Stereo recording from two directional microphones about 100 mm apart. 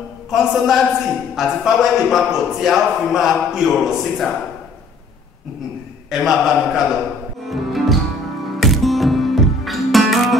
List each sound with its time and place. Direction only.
0.3 s a man's voice: centre (ahead or behind)
6.0 s a man's voice: centre (ahead or behind)
7.4 s music: centre (ahead or behind)